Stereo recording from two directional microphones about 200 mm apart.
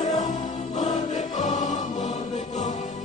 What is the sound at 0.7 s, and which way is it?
Music, 40° left (ahead or behind).